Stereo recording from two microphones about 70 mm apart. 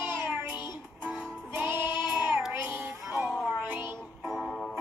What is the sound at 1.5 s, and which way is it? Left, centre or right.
Child singing, right.